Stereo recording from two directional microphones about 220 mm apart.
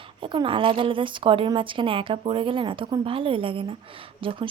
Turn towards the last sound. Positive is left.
turn(degrees=-25)  # may be behind; listen again after turning